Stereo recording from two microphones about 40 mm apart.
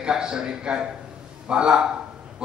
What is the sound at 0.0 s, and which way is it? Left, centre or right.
A man's voice, right.